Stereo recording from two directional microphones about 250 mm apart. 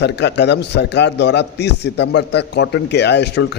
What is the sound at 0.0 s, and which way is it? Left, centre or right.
A man's voice, left.